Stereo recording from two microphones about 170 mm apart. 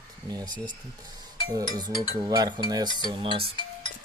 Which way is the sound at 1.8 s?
25° right (ahead or behind).